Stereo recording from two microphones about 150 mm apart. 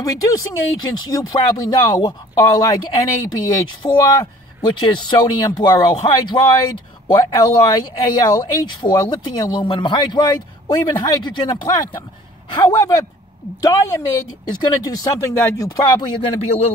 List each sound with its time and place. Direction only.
0.0 s speech: 25° left (ahead or behind); by 16.7 s 40° left (ahead or behind)